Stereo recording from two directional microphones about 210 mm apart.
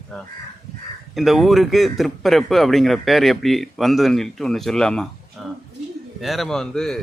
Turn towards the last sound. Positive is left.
turn(degrees=5)  # may be behind; listen again after turning